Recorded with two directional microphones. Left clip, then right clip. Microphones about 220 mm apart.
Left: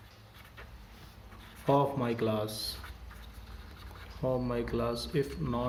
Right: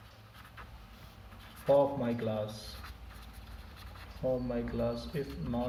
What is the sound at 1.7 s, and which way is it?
Speech, 50° left (ahead or behind).